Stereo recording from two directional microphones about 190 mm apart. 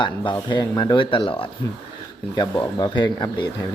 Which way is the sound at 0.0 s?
25° left (ahead or behind).